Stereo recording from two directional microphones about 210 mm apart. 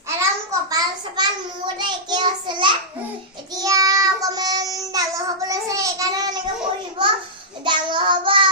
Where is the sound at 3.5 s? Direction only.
15° right (ahead or behind).